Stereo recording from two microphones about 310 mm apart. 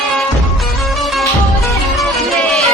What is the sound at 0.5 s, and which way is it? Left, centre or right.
Music, centre.